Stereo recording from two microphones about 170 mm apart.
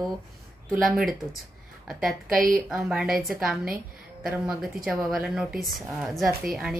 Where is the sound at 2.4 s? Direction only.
55° right (ahead or behind).